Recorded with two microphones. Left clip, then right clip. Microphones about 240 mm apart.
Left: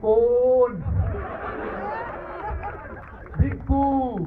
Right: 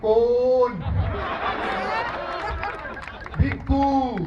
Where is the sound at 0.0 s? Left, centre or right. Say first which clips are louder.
Even; right.